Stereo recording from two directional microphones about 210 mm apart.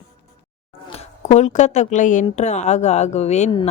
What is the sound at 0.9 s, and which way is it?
A woman's voice, 30° left (ahead or behind).